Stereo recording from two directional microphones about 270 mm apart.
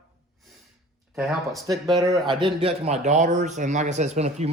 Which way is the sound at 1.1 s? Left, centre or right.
Centre.